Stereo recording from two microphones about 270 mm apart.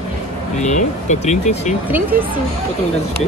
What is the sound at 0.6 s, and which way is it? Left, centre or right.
Speech, left.